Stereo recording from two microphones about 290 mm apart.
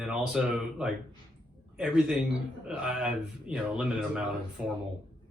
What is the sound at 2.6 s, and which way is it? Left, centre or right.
Speech, centre.